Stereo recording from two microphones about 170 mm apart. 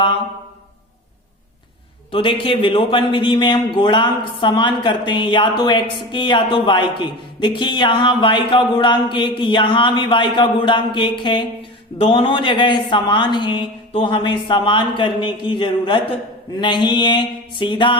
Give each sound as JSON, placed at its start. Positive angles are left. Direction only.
{"t": 2.1, "sound": "a man's voice", "side_deg": 30}